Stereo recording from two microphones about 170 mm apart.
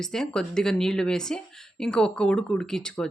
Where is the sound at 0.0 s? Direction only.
5° left (ahead or behind).